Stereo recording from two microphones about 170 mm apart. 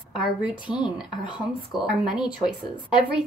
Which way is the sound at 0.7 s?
5° right (ahead or behind).